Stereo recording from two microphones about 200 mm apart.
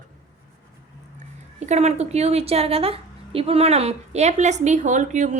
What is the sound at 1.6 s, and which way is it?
A woman's voice, 35° right (ahead or behind).